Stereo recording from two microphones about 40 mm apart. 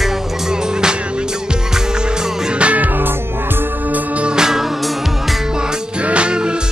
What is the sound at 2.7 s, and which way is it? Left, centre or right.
Music, right.